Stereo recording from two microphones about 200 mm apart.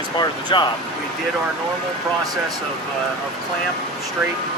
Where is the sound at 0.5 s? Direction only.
25° left (ahead or behind).